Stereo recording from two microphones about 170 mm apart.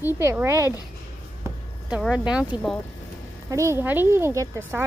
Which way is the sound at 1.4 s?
5° right (ahead or behind).